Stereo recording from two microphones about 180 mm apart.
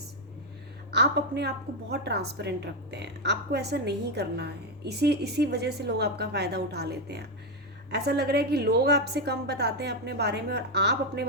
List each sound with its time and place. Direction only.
0.9 s a woman's voice: 65° right (ahead or behind)